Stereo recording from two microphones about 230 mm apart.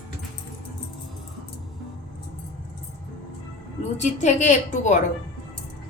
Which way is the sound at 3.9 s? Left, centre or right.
Left.